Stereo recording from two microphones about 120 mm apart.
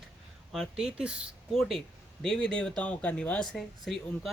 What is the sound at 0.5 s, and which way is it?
Speech, 5° right (ahead or behind).